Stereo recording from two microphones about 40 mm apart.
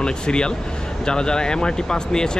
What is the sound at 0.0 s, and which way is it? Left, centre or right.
Speech, left.